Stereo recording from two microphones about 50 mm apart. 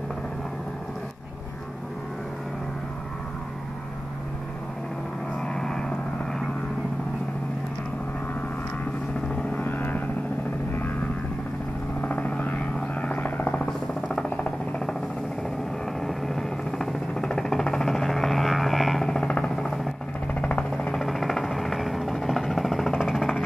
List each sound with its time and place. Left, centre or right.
5.4 s vehicle: centre
9.3 s vehicle: left
9.6 s vehicle: left
12.0 s vehicle: left
14.3 s music: left
16.0 s a sound: centre
19.4 s vehicle: centre
20.3 s music: left
20.9 s vehicle: centre